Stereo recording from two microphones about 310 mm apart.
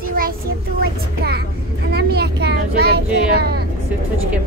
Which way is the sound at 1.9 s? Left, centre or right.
Right.